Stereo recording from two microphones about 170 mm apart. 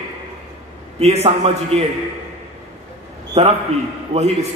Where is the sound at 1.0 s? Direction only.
40° right (ahead or behind).